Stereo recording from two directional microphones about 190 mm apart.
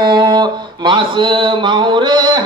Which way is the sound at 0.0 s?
25° right (ahead or behind).